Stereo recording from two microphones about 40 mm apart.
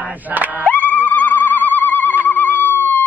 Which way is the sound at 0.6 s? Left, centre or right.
Left.